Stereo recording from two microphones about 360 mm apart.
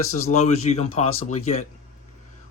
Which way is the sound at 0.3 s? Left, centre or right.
Centre.